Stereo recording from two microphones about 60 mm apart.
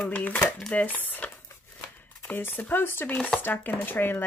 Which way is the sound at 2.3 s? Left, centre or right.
Left.